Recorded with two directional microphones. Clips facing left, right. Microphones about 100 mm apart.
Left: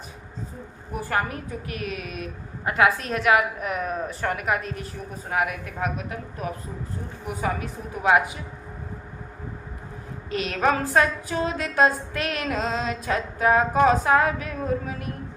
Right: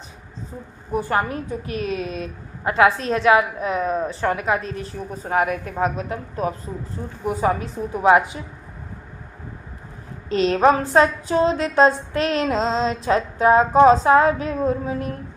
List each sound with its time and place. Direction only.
0.9 s a woman's voice: 25° right (ahead or behind)
10.2 s a woman's voice: 30° right (ahead or behind)